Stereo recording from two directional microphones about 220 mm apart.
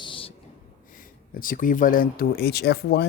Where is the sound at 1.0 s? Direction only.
40° left (ahead or behind).